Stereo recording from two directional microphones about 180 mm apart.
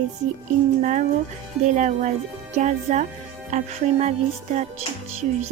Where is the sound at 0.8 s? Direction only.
45° right (ahead or behind).